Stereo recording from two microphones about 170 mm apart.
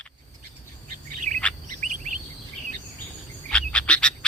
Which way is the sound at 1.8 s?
45° right (ahead or behind).